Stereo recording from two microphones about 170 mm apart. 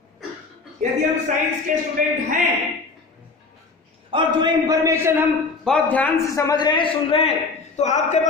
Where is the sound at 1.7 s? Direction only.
50° right (ahead or behind).